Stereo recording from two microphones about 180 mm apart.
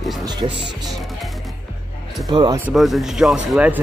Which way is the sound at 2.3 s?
25° right (ahead or behind).